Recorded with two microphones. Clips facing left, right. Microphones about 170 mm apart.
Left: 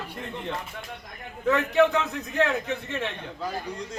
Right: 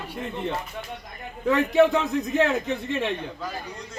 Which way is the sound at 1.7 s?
15° right (ahead or behind).